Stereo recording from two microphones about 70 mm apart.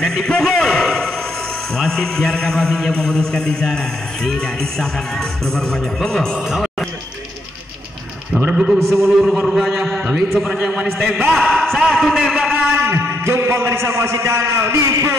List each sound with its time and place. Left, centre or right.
0.0 s a sound: centre
1.8 s a man's voice: centre
6.5 s music: centre
8.5 s a man's voice: centre
12.8 s a man's voice: right